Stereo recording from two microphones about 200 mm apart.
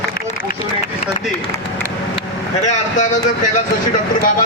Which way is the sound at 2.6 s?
40° left (ahead or behind).